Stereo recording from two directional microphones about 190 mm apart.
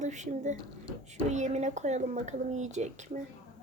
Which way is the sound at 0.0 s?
40° right (ahead or behind).